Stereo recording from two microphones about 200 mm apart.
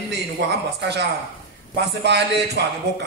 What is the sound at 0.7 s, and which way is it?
Speech, 55° right (ahead or behind).